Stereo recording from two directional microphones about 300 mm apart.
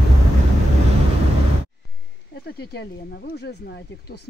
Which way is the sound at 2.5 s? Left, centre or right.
Left.